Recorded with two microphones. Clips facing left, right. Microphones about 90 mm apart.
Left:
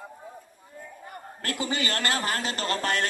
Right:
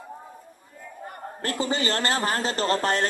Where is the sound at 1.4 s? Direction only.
35° right (ahead or behind).